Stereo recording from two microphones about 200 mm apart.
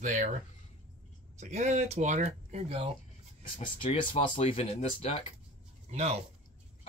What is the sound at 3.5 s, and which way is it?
Speech, 25° left (ahead or behind).